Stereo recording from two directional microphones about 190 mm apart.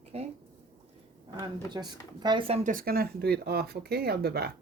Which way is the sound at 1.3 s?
25° right (ahead or behind).